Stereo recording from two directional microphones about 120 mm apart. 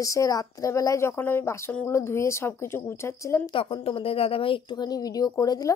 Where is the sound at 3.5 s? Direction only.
50° left (ahead or behind); by 5.7 s 30° left (ahead or behind).